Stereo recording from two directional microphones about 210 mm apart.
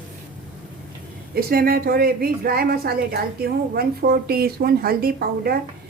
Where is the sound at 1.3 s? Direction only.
45° right (ahead or behind).